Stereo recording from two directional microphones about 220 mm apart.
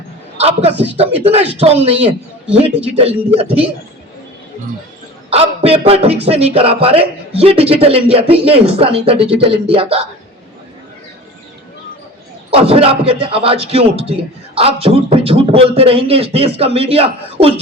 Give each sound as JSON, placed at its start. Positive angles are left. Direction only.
{"t": 0.3, "sound": "a man's voice", "side_deg": -30}
{"t": 5.3, "sound": "speech", "side_deg": -25}
{"t": 12.5, "sound": "speech", "side_deg": -25}